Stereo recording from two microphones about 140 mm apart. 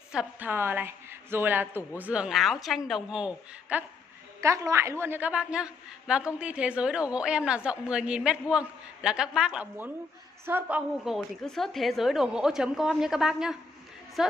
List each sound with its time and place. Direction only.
0.1 s a woman's voice: 10° right (ahead or behind)
4.4 s a woman's voice: 20° right (ahead or behind)
11.1 s a woman's voice: centre (ahead or behind)